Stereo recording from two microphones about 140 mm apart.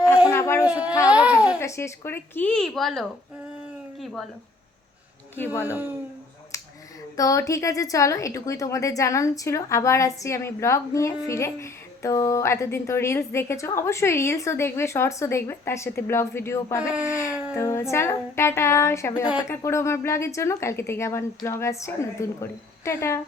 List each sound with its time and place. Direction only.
0.3 s a sound: 20° left (ahead or behind)
1.1 s babbling: 10° right (ahead or behind)
1.5 s speech: 20° left (ahead or behind); by 4.3 s centre (ahead or behind)
7.2 s a woman's voice: 25° left (ahead or behind)